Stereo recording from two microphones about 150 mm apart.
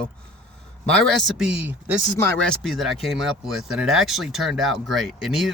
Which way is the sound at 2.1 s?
15° left (ahead or behind).